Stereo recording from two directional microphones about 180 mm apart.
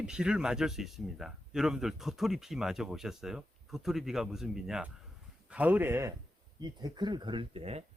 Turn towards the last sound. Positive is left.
turn(degrees=-35)  # may be behind; listen again after turning